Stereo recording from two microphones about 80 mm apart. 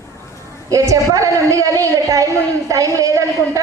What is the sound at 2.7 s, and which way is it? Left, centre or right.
Speech, right.